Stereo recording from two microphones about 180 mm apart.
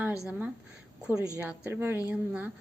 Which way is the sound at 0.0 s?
5° right (ahead or behind).